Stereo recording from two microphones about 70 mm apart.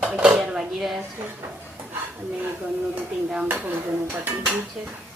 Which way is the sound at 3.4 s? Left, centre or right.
Right.